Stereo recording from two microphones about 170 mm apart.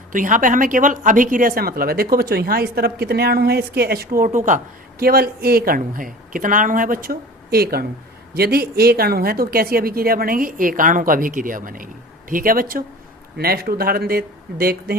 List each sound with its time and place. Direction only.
0.1 s a woman's voice: 50° right (ahead or behind)